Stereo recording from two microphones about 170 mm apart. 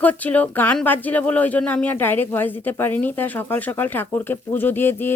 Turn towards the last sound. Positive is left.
turn(degrees=10)  # may be behind; listen again after turning